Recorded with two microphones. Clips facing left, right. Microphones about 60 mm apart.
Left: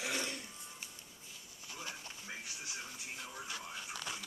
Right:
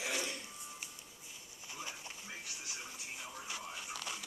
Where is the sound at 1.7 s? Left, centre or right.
Centre.